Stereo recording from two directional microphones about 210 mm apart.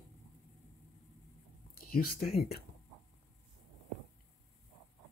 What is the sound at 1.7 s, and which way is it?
Speech, 45° left (ahead or behind).